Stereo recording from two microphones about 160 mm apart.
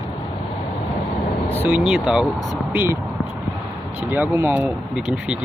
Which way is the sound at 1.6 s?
5° right (ahead or behind).